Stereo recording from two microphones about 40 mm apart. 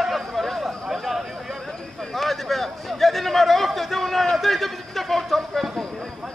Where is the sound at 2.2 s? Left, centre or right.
Centre.